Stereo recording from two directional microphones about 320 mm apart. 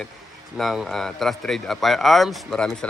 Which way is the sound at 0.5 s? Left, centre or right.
Centre.